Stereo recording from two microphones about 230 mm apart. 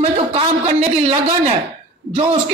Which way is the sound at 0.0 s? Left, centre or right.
Right.